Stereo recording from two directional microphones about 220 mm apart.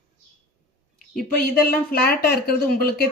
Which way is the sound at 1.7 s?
40° left (ahead or behind).